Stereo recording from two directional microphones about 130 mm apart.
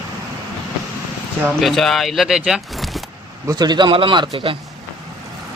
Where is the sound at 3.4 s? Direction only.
30° right (ahead or behind).